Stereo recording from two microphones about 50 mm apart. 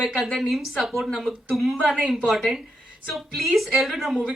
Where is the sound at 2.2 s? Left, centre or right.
Centre.